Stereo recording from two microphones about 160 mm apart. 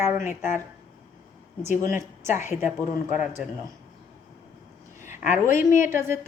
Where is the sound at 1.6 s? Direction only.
15° right (ahead or behind).